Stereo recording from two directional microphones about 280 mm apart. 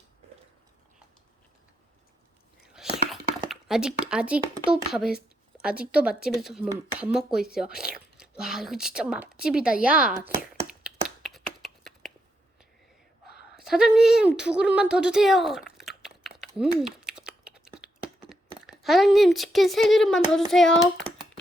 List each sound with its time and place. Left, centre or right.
2.7 s a sound: centre
4.7 s speech: centre
8.2 s a sound: centre
13.6 s speech: centre
16.5 s typing: centre
18.3 s speech: centre